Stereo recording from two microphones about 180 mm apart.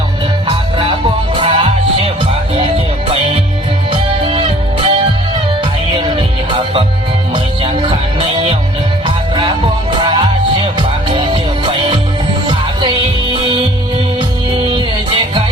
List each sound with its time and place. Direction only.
0.4 s music: 30° right (ahead or behind)
14.7 s music: 25° right (ahead or behind)